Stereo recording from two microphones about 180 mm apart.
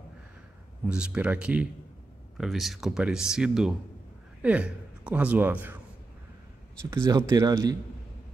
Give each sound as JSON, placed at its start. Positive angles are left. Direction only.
{"t": 0.8, "sound": "a man's voice", "side_deg": -5}
{"t": 6.9, "sound": "speech", "side_deg": -20}